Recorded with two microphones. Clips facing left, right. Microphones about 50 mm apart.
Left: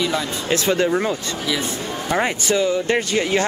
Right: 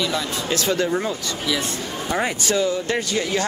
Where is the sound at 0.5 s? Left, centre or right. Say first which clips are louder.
Left 3 dB; left.